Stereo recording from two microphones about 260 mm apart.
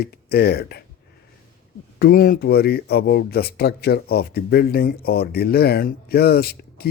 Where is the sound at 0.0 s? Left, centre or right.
Left.